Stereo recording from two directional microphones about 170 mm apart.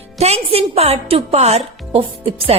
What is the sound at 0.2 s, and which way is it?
Speech, 40° right (ahead or behind).